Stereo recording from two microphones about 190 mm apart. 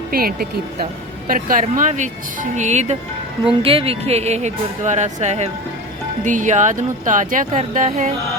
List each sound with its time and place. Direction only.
0.1 s speech: 50° right (ahead or behind)